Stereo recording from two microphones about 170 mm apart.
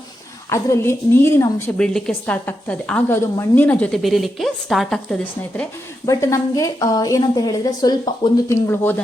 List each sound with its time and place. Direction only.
0.5 s a woman's voice: 15° left (ahead or behind)
1.8 s a woman's voice: 5° left (ahead or behind)
6.1 s a woman's voice: 20° left (ahead or behind)